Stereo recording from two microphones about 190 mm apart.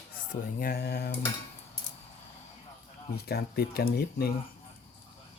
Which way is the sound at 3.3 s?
55° left (ahead or behind).